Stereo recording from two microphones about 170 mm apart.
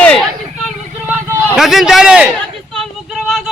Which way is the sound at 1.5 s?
Centre (ahead or behind).